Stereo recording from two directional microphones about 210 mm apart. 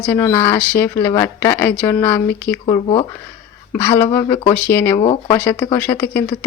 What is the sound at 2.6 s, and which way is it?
Speech, 20° left (ahead or behind).